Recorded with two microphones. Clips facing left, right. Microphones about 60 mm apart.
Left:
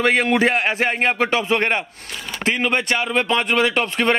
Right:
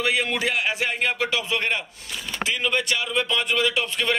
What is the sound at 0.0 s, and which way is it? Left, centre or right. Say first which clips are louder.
A man's voice: left 7 dB; left.